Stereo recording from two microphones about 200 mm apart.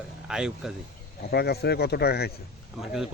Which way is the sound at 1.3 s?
55° left (ahead or behind).